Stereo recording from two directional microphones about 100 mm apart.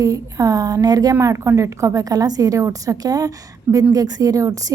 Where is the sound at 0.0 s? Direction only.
35° right (ahead or behind).